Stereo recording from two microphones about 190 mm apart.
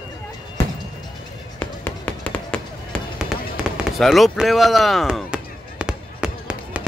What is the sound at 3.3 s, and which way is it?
Fireworks, centre (ahead or behind).